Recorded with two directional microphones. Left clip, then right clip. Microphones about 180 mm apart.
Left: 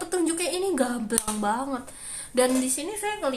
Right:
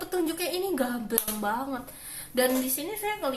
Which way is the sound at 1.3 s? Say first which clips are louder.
Left 4 dB; 20° left (ahead or behind).